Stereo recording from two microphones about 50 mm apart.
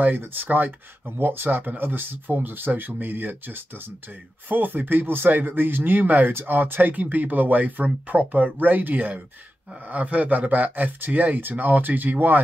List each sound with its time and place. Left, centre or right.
0.0 s speech: right